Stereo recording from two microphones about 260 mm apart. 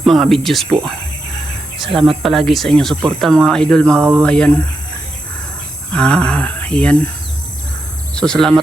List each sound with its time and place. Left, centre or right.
0.0 s speech: centre
1.9 s speech: centre
2.2 s speech: centre
5.9 s speech: centre
8.1 s speech: centre